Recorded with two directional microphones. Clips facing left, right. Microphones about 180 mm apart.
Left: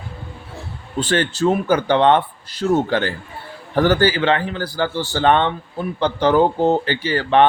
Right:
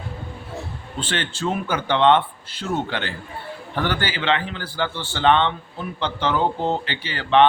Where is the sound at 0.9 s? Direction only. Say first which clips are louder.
Left 8 dB; 40° left (ahead or behind).